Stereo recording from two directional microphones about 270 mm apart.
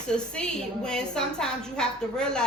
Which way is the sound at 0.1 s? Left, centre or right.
Centre.